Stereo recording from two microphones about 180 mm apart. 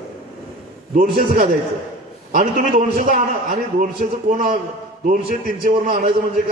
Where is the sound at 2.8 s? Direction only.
45° right (ahead or behind).